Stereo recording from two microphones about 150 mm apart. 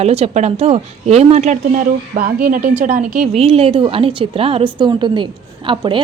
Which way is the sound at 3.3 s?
40° right (ahead or behind).